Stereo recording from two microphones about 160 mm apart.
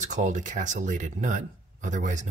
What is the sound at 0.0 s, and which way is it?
Speech, 50° right (ahead or behind).